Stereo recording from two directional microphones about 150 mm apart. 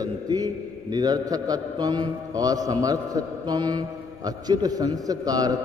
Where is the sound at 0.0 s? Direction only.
25° right (ahead or behind).